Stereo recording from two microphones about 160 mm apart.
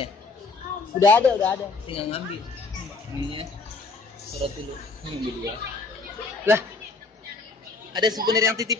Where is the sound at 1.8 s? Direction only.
35° left (ahead or behind).